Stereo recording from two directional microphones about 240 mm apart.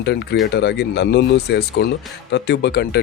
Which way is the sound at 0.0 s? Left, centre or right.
Left.